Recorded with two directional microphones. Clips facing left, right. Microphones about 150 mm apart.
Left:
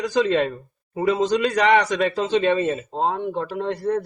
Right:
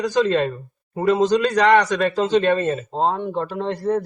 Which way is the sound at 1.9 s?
Centre (ahead or behind).